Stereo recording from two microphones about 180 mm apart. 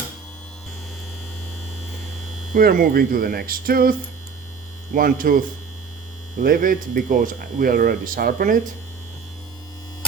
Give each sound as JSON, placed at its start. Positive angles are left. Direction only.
{"t": 2.5, "sound": "speech", "side_deg": -50}
{"t": 4.9, "sound": "speech", "side_deg": -50}